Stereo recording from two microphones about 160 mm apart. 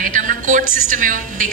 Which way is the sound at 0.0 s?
55° right (ahead or behind).